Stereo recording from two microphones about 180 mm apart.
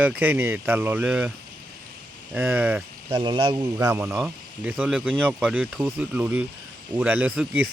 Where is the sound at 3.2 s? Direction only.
25° right (ahead or behind).